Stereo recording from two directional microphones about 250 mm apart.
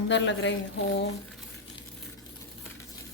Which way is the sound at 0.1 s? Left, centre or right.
Left.